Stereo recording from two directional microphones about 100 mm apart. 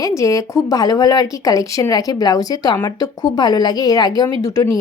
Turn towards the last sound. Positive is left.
turn(degrees=40)  # may be behind; listen again after turning